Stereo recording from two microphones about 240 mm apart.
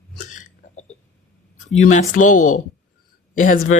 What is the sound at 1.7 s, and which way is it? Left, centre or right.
Speech, left.